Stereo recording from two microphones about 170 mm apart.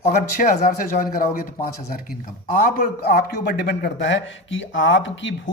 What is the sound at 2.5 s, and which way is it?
A man's voice, 55° left (ahead or behind).